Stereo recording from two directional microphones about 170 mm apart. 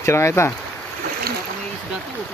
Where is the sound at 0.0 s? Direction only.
15° left (ahead or behind).